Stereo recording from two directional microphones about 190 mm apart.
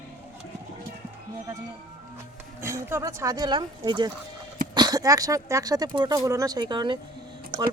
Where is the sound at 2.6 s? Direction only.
10° right (ahead or behind).